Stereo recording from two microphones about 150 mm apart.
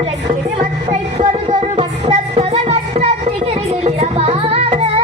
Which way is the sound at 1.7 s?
45° right (ahead or behind).